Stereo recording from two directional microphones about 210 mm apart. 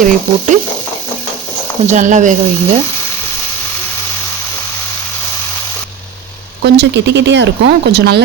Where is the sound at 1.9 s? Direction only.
35° right (ahead or behind).